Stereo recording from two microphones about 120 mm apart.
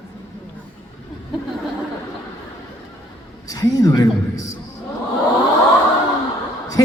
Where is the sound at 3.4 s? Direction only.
30° left (ahead or behind).